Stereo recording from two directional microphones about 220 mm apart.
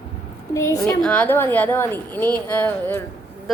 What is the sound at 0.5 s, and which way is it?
A woman's voice, 15° left (ahead or behind).